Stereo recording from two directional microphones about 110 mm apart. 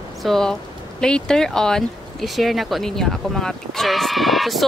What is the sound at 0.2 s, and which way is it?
Speech, 5° left (ahead or behind).